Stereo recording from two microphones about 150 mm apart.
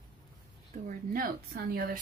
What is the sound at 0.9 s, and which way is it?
Speech, 70° right (ahead or behind).